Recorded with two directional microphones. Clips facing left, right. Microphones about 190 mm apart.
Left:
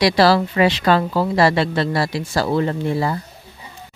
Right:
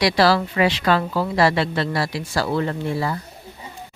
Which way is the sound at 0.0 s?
30° left (ahead or behind).